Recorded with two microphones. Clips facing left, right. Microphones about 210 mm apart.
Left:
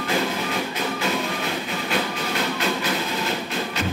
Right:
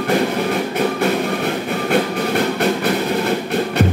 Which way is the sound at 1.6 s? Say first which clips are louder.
Right 8 dB; 60° right (ahead or behind).